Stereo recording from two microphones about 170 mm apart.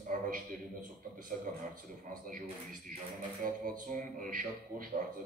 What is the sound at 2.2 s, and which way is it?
A man's voice, 55° right (ahead or behind).